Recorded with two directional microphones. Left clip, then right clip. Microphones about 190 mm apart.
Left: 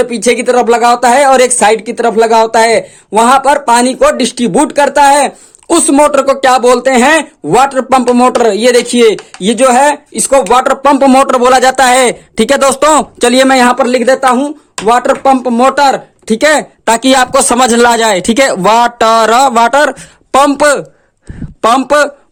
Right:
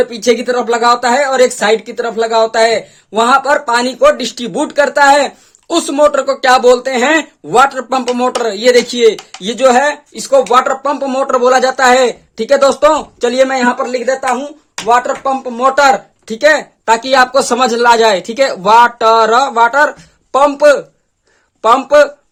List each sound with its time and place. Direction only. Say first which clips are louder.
0.0 s speech: left 2 dB; 35° left (ahead or behind)